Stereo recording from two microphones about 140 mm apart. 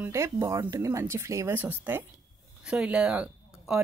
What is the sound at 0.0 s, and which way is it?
Speech, 20° right (ahead or behind).